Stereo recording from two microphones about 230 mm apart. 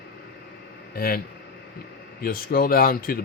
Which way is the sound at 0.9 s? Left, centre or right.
Left.